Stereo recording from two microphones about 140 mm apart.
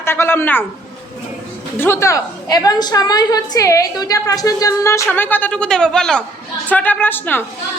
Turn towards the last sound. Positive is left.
turn(degrees=15)  # may be behind; listen again after turning